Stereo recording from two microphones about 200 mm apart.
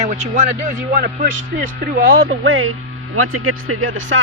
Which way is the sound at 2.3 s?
90° right.